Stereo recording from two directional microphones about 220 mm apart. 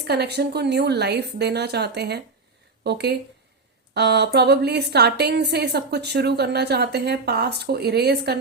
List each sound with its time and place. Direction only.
0.0 s a woman's voice: 50° right (ahead or behind)